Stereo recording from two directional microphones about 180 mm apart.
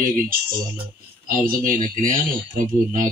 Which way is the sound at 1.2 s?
50° right (ahead or behind).